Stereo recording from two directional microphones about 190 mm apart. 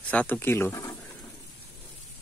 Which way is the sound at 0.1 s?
10° left (ahead or behind).